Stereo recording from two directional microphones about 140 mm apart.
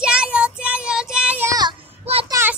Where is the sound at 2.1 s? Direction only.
45° right (ahead or behind).